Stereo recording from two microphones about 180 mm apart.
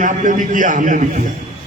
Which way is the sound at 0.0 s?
45° right (ahead or behind).